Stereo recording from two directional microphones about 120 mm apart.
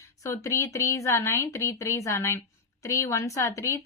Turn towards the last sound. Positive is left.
turn(degrees=25)  # may be behind; listen again after turning